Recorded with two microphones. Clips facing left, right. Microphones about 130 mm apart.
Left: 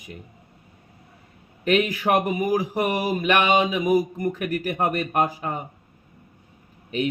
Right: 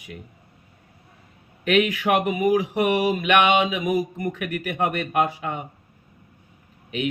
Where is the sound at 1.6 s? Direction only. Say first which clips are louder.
Right 1 dB; 35° left (ahead or behind).